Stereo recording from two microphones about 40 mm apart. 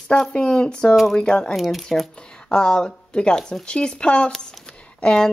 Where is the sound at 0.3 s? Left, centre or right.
Left.